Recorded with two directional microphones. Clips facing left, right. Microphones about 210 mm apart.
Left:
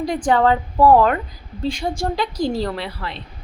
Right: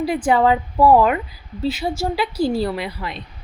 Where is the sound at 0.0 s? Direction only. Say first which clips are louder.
Even; 5° right (ahead or behind).